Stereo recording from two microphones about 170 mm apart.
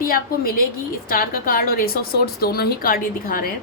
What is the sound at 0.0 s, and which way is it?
A woman's voice, 60° left (ahead or behind).